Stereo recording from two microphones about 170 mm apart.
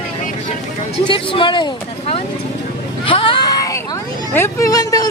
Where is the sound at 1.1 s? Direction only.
30° left (ahead or behind).